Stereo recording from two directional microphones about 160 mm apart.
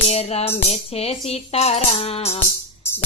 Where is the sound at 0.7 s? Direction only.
40° left (ahead or behind).